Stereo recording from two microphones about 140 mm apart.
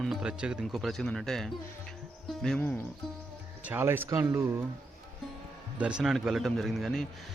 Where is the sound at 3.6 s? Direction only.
15° right (ahead or behind).